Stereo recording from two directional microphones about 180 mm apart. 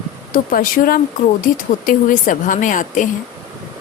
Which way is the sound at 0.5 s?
50° left (ahead or behind).